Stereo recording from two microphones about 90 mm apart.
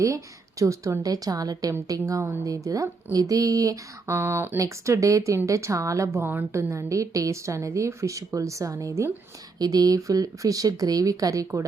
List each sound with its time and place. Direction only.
0.6 s a woman's voice: 35° right (ahead or behind)